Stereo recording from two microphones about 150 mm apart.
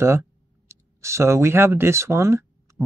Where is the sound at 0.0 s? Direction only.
15° right (ahead or behind).